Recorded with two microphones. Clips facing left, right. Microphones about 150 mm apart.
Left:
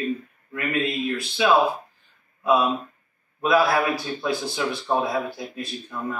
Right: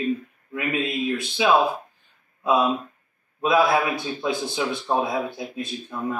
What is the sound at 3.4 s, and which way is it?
A man's voice, 20° right (ahead or behind).